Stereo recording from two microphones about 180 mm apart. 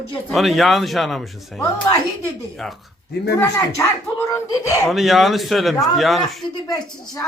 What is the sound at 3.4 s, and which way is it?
Speech, 15° left (ahead or behind).